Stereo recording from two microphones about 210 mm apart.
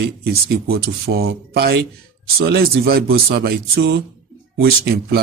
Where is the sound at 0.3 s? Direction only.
50° right (ahead or behind).